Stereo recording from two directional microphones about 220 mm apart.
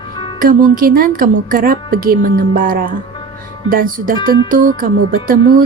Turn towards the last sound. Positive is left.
turn(degrees=-40)  # may be behind; listen again after turning